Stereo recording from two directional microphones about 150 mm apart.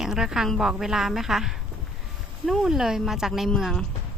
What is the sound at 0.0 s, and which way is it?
A woman's voice, 5° right (ahead or behind).